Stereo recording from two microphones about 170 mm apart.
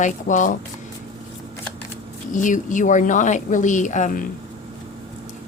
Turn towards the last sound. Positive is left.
turn(degrees=45)  # may be behind; listen again after turning